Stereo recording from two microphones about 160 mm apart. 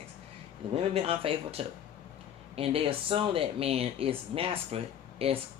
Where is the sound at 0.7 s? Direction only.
35° right (ahead or behind).